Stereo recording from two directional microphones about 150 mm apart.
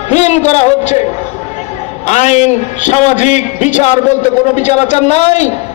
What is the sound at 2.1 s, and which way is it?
A man's voice, 50° left (ahead or behind).